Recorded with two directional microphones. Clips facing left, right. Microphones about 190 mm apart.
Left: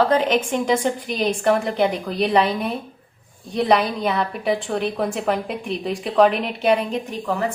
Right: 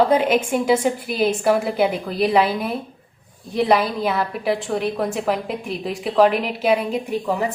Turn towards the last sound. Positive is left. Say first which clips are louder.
# right 2 dB
turn(degrees=-15)  # may be behind; listen again after turning